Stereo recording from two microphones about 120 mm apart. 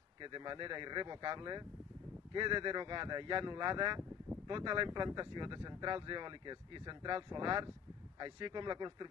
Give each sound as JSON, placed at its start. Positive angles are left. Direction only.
{"t": 0.2, "sound": "speech", "side_deg": -40}